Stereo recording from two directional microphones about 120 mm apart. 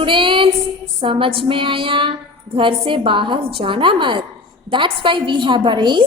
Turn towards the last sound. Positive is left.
turn(degrees=-40)  # may be behind; listen again after turning